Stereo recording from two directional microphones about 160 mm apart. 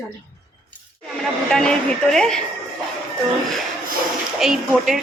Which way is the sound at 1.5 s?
5° left (ahead or behind).